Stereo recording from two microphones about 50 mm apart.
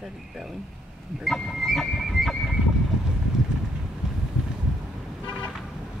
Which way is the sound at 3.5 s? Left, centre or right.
Centre.